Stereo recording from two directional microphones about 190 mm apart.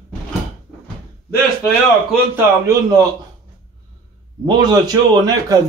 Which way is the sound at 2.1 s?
10° right (ahead or behind).